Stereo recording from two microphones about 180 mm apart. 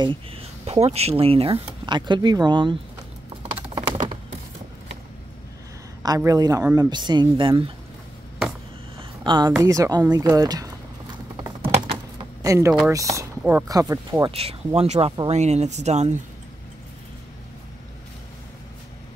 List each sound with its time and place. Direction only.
0.0 s speech: 30° right (ahead or behind)
6.0 s speech: 20° right (ahead or behind)
9.2 s speech: 25° right (ahead or behind)
11.6 s typing: 30° right (ahead or behind)
12.4 s speech: 15° right (ahead or behind)
13.7 s speech: 20° right (ahead or behind)
14.3 s speech: 35° right (ahead or behind)